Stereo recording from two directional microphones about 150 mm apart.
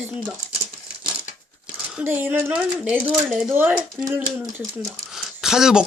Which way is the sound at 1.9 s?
10° right (ahead or behind).